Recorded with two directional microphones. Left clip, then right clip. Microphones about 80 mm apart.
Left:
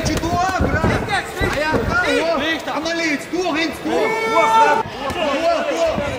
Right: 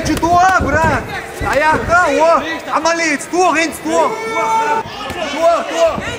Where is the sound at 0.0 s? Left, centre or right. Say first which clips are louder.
Right 8 dB; right.